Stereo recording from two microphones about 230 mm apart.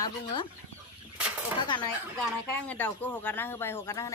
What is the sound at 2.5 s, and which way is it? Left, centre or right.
Speech, centre.